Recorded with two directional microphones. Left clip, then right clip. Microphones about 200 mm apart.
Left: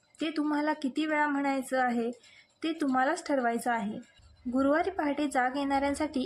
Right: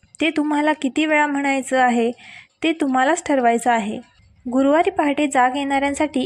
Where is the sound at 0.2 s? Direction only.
25° right (ahead or behind).